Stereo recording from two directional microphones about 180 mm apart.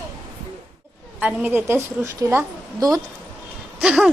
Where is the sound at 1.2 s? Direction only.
10° right (ahead or behind).